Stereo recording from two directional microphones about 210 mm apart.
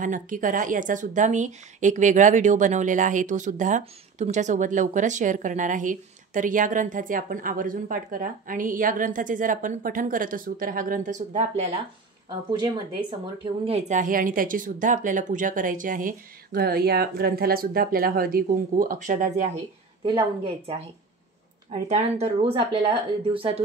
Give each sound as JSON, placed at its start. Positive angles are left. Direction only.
{"t": 0.0, "sound": "speech", "side_deg": -40}
{"t": 13.4, "sound": "speech", "side_deg": -30}
{"t": 21.6, "sound": "speech", "side_deg": -35}